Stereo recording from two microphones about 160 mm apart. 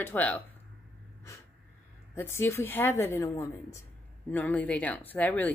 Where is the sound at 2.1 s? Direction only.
15° left (ahead or behind).